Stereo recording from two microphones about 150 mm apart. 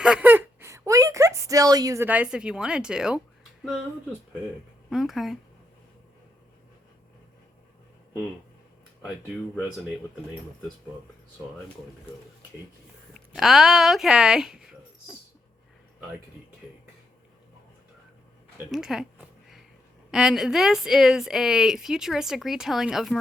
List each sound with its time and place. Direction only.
0.0 s a sound: 10° right (ahead or behind)
2.0 s speech: 10° right (ahead or behind)
4.9 s speech: centre (ahead or behind)
13.1 s speech: centre (ahead or behind)
18.7 s speech: 5° right (ahead or behind)
20.1 s speech: 5° right (ahead or behind)